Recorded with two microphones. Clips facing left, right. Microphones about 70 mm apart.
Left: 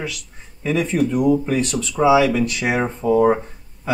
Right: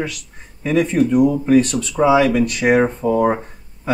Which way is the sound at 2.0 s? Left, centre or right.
Centre.